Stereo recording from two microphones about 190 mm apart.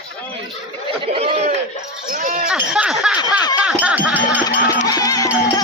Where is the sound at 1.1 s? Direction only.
35° right (ahead or behind).